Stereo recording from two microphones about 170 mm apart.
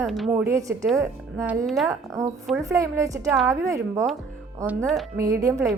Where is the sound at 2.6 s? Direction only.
20° right (ahead or behind).